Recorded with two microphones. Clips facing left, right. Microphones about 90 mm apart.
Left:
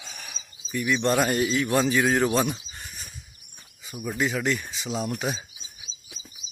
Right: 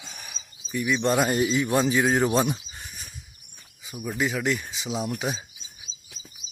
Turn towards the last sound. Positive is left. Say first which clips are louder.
# left 1 dB
turn(degrees=5)  # may be behind; listen again after turning